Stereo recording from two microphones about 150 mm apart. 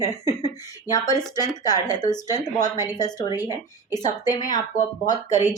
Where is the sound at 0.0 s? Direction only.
25° left (ahead or behind).